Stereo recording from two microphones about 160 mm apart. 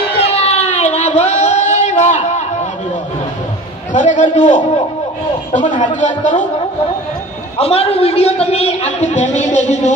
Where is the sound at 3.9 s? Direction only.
50° left (ahead or behind).